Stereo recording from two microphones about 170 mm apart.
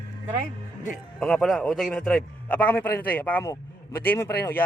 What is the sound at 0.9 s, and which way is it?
Speech, 5° left (ahead or behind).